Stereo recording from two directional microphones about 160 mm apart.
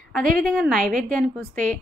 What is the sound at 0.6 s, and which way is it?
A woman's voice, centre (ahead or behind).